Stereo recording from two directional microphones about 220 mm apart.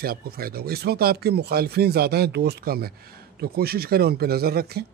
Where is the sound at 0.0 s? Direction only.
40° right (ahead or behind).